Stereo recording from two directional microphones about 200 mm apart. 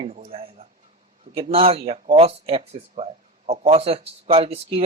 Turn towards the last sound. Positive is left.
turn(degrees=-30)  # may be behind; listen again after turning